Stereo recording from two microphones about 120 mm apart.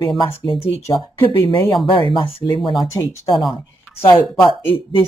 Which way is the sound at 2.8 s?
25° left (ahead or behind).